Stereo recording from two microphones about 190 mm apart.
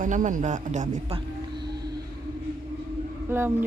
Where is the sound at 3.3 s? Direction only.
10° right (ahead or behind).